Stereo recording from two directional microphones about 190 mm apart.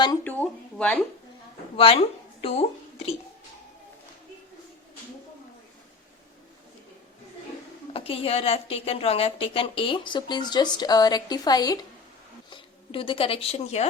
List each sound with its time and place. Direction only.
0.3 s a sound: 10° left (ahead or behind)
1.7 s speech: 30° left (ahead or behind)
7.9 s a woman's voice: 30° left (ahead or behind)